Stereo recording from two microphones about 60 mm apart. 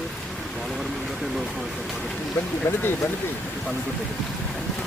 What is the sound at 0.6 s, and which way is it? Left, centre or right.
Speech, centre.